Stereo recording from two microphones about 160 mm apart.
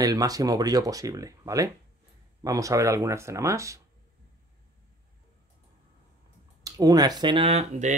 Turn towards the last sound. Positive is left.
turn(degrees=-45)  # may be behind; listen again after turning